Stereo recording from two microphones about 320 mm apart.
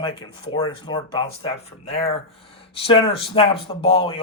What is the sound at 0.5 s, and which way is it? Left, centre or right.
A man's voice, centre.